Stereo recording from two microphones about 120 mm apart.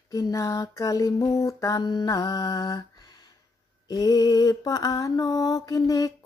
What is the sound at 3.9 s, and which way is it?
Mantra, 30° left (ahead or behind).